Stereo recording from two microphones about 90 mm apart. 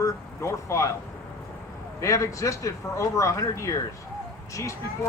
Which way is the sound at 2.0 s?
35° left (ahead or behind).